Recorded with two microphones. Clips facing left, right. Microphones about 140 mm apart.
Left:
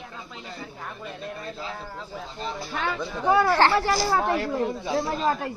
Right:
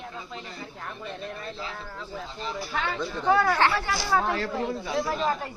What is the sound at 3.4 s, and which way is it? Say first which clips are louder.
Speech: left 4 dB; 30° left (ahead or behind).